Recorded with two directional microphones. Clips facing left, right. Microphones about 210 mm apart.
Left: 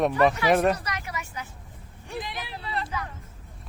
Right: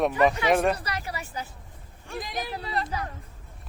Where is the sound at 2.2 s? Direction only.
40° right (ahead or behind).